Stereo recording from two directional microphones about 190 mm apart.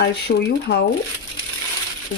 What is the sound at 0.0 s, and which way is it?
Speech, 60° left (ahead or behind).